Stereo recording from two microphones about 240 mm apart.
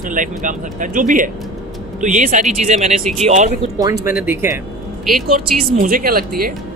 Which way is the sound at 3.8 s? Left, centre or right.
Centre.